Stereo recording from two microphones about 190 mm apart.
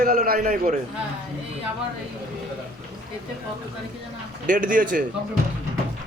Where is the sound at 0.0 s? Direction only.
50° right (ahead or behind).